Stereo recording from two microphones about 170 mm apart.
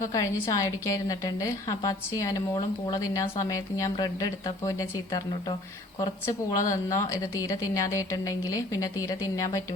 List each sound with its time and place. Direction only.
0.0 s speech: 20° left (ahead or behind)
6.6 s speech: 20° left (ahead or behind)